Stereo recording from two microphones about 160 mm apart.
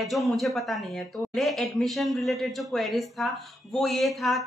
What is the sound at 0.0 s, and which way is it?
A man's voice, centre (ahead or behind).